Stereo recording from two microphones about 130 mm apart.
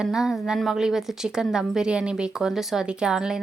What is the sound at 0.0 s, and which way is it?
A woman's voice, 5° right (ahead or behind).